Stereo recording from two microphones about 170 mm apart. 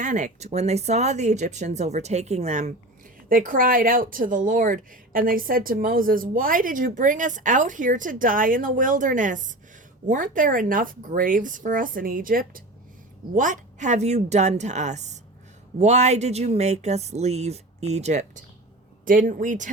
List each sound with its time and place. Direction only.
0.0 s speech: 45° right (ahead or behind)
3.2 s a woman's voice: 55° right (ahead or behind)
19.0 s a woman's voice: 55° right (ahead or behind)